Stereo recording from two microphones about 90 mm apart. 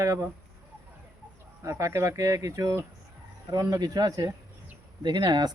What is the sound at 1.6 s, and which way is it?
Speech, 35° right (ahead or behind).